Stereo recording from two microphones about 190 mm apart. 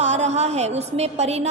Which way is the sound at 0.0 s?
35° right (ahead or behind).